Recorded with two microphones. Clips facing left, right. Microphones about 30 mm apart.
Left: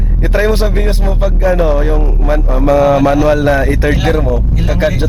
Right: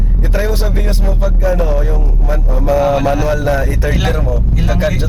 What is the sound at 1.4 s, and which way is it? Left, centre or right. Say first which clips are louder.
Speech: left 5 dB; left.